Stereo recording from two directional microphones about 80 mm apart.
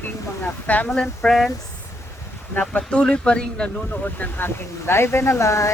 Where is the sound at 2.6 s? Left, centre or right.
Centre.